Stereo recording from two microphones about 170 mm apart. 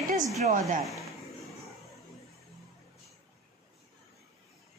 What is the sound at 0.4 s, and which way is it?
Speech, 50° right (ahead or behind).